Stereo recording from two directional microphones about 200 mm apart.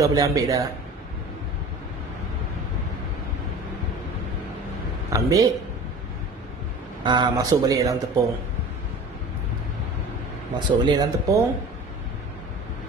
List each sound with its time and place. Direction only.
0.0 s a man's voice: 15° right (ahead or behind)
5.1 s a man's voice: 15° right (ahead or behind)
7.0 s speech: 20° right (ahead or behind)
10.9 s a man's voice: 15° right (ahead or behind)